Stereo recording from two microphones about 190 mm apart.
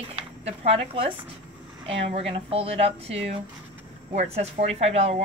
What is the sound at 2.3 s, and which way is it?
A woman's voice, 30° right (ahead or behind).